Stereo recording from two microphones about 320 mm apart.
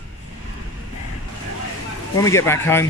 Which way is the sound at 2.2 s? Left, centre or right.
Centre.